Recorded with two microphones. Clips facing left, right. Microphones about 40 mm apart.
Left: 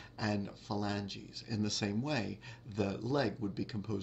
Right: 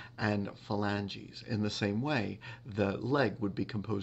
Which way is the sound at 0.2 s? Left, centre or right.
Right.